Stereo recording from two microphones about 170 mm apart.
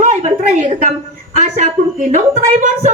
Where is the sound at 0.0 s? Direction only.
45° right (ahead or behind).